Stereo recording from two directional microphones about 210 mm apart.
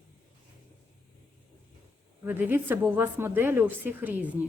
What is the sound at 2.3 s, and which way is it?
A woman's voice, 10° right (ahead or behind).